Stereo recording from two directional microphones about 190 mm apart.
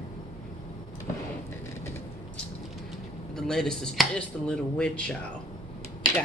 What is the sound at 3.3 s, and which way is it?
Speech, centre (ahead or behind).